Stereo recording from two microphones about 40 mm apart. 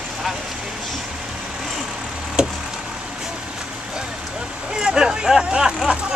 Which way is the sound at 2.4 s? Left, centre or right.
Right.